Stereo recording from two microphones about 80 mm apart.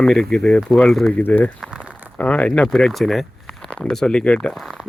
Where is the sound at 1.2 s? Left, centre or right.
Centre.